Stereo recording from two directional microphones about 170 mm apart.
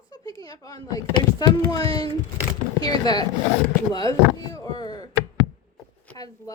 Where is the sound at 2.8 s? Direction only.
25° left (ahead or behind).